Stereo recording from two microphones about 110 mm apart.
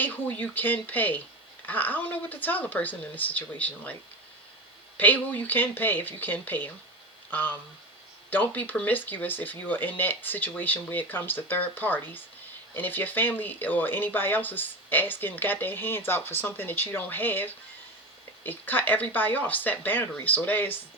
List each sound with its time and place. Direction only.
0.0 s speech: 15° left (ahead or behind)
4.9 s speech: 15° left (ahead or behind)